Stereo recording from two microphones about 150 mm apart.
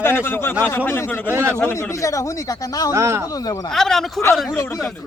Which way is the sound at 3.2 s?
25° left (ahead or behind).